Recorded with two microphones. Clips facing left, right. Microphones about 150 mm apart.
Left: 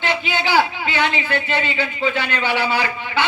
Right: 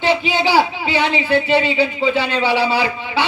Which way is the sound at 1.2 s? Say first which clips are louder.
Right 7 dB; 30° right (ahead or behind).